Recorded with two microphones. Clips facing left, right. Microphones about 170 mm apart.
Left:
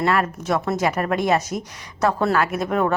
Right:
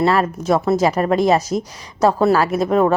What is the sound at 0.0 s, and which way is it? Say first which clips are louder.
A woman's voice: right 4 dB; 30° right (ahead or behind).